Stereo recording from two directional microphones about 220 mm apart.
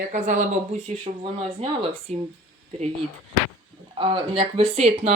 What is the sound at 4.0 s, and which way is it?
Speech, 25° right (ahead or behind).